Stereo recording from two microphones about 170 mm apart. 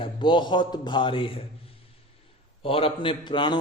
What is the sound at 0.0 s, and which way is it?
A man's voice, 30° left (ahead or behind).